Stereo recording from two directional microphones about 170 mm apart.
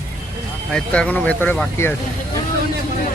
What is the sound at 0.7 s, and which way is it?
Speech, 5° left (ahead or behind).